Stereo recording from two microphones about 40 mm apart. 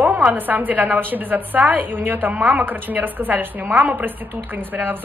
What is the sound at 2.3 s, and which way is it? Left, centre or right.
Speech, right.